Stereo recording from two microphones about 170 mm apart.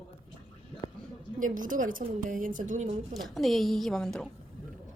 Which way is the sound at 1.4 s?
50° right (ahead or behind).